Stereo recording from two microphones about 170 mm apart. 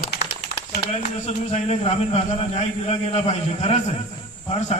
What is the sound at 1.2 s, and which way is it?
A man's voice, 40° left (ahead or behind).